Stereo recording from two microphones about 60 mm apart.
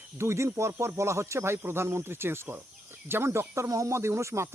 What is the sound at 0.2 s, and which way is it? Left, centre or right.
Speech, right.